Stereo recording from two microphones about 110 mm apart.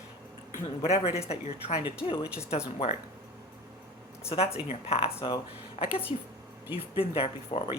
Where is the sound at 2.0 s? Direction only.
55° left (ahead or behind).